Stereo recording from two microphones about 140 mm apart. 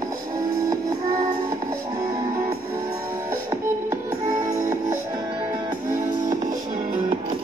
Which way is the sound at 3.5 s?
25° right (ahead or behind).